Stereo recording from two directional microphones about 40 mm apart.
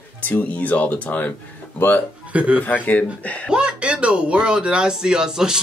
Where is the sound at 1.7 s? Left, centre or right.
Left.